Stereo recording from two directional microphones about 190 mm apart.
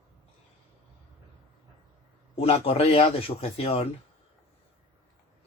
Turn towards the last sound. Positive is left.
turn(degrees=30)  # may be behind; listen again after turning